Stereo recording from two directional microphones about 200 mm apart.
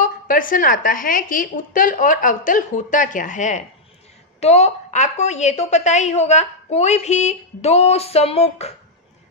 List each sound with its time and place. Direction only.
0.0 s a woman's voice: 45° left (ahead or behind)